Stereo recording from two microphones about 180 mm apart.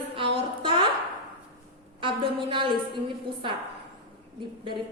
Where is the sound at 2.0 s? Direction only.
30° right (ahead or behind).